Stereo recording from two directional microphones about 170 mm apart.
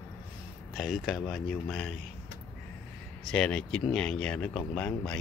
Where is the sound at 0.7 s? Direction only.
Centre (ahead or behind).